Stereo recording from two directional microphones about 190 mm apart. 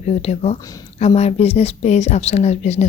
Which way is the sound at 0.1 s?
35° left (ahead or behind).